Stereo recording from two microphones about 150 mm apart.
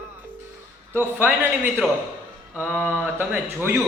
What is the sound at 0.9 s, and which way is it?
Speech, 15° right (ahead or behind).